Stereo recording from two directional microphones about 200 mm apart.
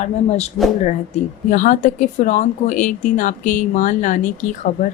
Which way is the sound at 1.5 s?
40° left (ahead or behind).